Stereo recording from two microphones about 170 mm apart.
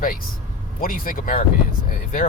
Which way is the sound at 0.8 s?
55° left (ahead or behind).